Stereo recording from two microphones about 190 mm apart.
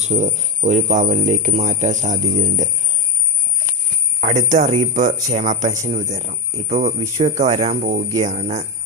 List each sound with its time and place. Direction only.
0.0 s speech: 35° right (ahead or behind)
4.2 s speech: 40° right (ahead or behind)